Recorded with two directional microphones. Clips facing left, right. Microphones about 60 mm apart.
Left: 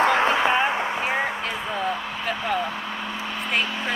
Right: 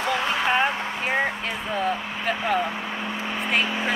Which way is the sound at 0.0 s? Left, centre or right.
Left.